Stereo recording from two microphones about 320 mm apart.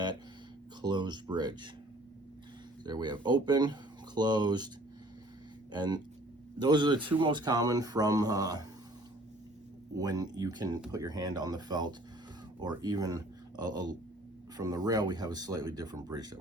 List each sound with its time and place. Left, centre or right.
0.8 s speech: centre
2.8 s speech: centre
5.7 s speech: centre
10.0 s speech: centre